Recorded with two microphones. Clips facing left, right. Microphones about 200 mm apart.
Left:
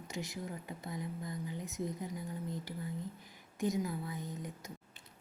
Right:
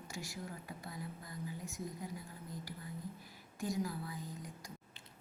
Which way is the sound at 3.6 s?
20° left (ahead or behind).